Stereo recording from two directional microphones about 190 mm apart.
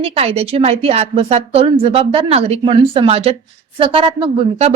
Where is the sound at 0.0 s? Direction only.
30° right (ahead or behind).